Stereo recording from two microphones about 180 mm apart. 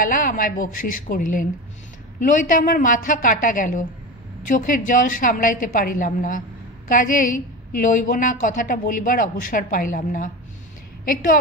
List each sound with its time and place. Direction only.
0.0 s a woman's voice: 50° left (ahead or behind)